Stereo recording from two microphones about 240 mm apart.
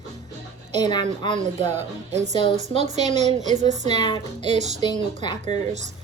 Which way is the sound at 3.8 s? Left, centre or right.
Centre.